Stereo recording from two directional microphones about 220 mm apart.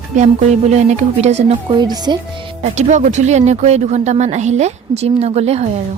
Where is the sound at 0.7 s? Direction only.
30° right (ahead or behind).